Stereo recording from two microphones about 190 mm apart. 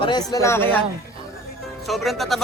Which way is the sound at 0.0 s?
20° left (ahead or behind).